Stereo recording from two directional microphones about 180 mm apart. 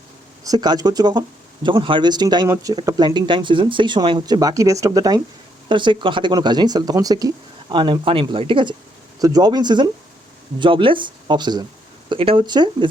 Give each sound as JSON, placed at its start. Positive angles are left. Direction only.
{"t": 0.4, "sound": "speech", "side_deg": -20}